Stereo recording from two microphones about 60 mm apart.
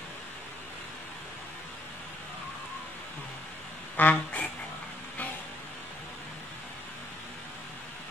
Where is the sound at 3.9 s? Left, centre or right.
Left.